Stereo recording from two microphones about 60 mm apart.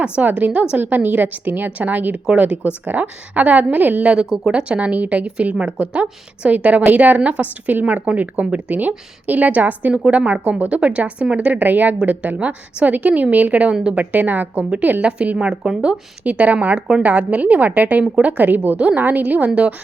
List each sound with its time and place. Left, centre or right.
0.0 s a woman's voice: right
4.1 s a woman's voice: centre
11.6 s a woman's voice: right
15.4 s a woman's voice: centre